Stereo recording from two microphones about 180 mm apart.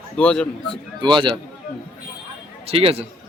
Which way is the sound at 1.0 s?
25° right (ahead or behind).